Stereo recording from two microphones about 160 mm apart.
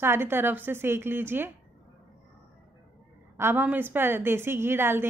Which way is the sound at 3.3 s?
15° right (ahead or behind).